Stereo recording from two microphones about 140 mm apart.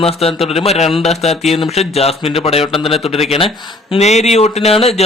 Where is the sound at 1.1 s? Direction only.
50° left (ahead or behind).